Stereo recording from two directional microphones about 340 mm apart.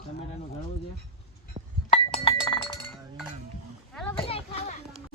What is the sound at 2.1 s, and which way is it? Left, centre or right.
Chink, centre.